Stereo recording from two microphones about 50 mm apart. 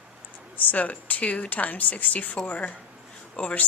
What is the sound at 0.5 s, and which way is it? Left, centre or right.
A woman's voice, left.